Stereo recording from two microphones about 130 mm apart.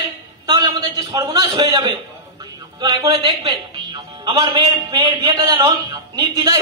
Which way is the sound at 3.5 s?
45° right (ahead or behind).